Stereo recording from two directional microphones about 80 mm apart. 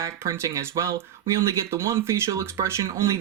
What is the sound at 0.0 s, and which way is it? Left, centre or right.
Speech, right.